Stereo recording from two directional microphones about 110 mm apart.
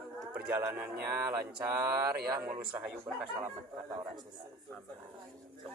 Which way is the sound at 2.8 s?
10° right (ahead or behind).